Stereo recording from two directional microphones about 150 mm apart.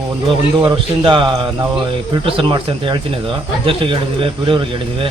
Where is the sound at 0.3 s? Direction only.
35° right (ahead or behind).